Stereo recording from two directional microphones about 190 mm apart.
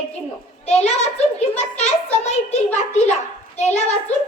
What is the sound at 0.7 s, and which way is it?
A child's voice, 35° left (ahead or behind).